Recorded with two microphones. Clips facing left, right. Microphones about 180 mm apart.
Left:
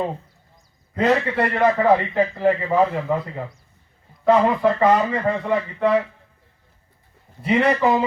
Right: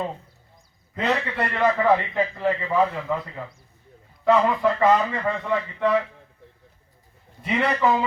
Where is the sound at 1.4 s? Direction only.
30° left (ahead or behind).